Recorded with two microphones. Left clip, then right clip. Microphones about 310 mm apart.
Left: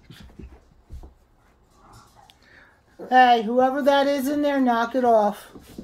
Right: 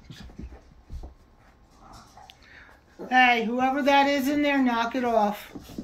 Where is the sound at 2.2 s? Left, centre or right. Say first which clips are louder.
Right 2 dB; centre.